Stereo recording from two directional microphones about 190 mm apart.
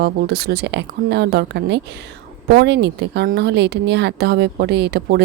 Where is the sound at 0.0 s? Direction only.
55° right (ahead or behind).